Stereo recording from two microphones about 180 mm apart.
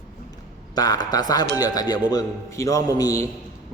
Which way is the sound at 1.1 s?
20° left (ahead or behind).